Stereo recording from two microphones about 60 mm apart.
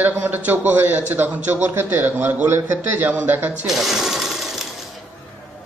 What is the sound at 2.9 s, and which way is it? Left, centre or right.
Speech, right.